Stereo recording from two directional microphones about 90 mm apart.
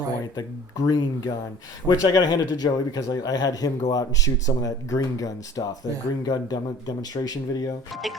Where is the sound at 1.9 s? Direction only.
45° left (ahead or behind).